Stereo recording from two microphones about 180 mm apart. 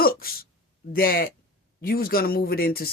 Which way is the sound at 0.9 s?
55° left (ahead or behind).